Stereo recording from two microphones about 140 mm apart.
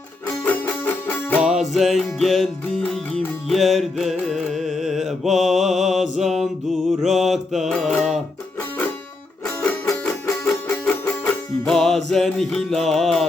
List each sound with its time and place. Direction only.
0.4 s music: 15° left (ahead or behind)
1.4 s music: 5° right (ahead or behind)
3.5 s carnatic music: centre (ahead or behind)
7.0 s mantra: centre (ahead or behind)
9.6 s music: 20° left (ahead or behind)
10.1 s music: 10° left (ahead or behind)